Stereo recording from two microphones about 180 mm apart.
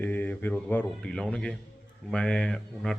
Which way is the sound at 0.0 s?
10° left (ahead or behind).